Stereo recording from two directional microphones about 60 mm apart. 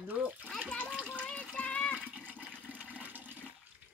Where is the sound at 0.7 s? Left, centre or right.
Left.